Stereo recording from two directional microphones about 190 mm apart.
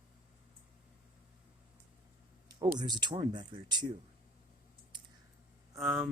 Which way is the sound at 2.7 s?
20° right (ahead or behind).